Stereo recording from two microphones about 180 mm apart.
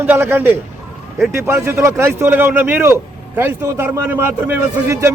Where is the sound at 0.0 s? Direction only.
10° right (ahead or behind).